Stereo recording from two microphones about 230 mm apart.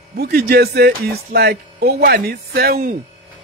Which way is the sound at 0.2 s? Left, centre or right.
Right.